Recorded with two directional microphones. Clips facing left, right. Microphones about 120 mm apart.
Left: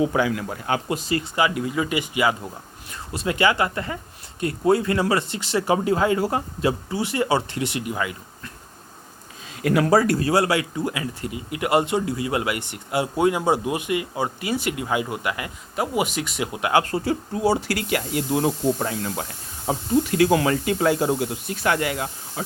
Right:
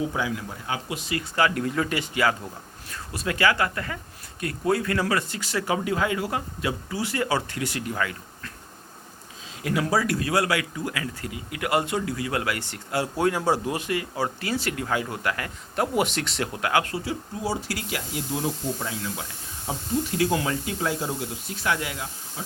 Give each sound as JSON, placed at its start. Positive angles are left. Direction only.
{"t": 0.0, "sound": "speech", "side_deg": 70}
{"t": 0.9, "sound": "speech", "side_deg": 35}
{"t": 1.4, "sound": "speech", "side_deg": 10}
{"t": 9.6, "sound": "speech", "side_deg": 60}
{"t": 10.1, "sound": "speech", "side_deg": 35}
{"t": 16.8, "sound": "speech", "side_deg": 50}
{"t": 17.4, "sound": "speech", "side_deg": 70}
{"t": 19.6, "sound": "speech", "side_deg": 75}